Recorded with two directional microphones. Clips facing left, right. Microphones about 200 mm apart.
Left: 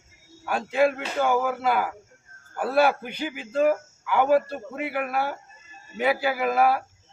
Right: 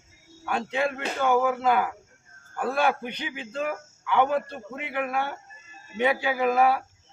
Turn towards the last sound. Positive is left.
turn(degrees=5)  # may be behind; listen again after turning